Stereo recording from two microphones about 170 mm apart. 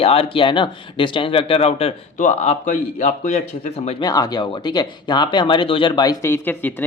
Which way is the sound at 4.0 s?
25° left (ahead or behind).